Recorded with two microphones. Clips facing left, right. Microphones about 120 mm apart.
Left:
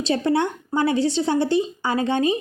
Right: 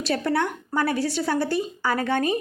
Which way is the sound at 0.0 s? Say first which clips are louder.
Left 3 dB; 20° left (ahead or behind).